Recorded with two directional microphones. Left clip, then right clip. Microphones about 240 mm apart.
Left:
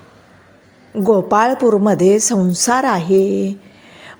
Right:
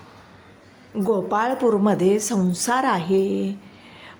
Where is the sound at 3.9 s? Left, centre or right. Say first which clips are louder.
Left 6 dB; left.